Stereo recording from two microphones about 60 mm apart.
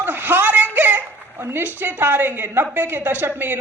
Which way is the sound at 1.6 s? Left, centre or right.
Right.